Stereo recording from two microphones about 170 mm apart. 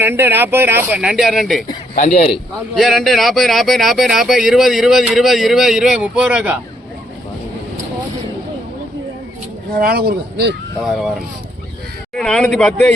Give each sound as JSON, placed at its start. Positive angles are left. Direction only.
{"t": 0.0, "sound": "speech", "side_deg": -10}
{"t": 2.0, "sound": "a man's voice", "side_deg": 45}
{"t": 2.7, "sound": "speech", "side_deg": 0}
{"t": 9.7, "sound": "speech", "side_deg": -65}
{"t": 12.1, "sound": "speech", "side_deg": 5}